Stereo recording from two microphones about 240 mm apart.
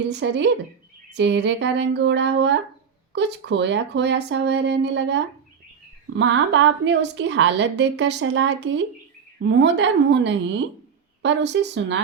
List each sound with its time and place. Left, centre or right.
0.1 s a woman's voice: right